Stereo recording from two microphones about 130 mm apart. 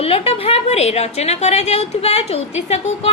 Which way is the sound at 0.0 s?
50° left (ahead or behind).